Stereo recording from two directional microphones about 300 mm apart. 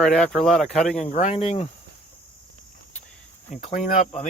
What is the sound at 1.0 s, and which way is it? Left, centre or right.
Speech, left.